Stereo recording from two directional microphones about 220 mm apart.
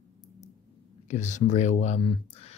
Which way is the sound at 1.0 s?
35° left (ahead or behind).